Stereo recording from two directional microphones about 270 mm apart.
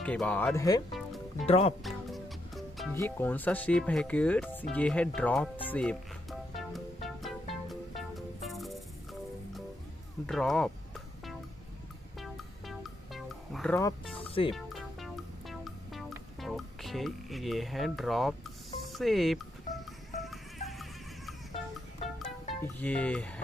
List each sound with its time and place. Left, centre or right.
0.0 s speech: centre; by 1.8 s left
1.8 s speech: centre
6.5 s music: centre
10.2 s speech: centre
12.2 s music: centre
14.1 s music: centre
14.5 s music: centre